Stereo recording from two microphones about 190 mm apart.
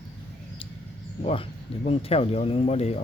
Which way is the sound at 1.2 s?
30° left (ahead or behind).